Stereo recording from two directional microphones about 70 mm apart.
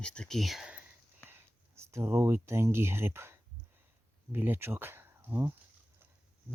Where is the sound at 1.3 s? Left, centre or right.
Right.